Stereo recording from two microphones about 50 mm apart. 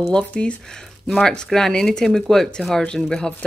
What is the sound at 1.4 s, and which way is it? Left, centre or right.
Speech, centre.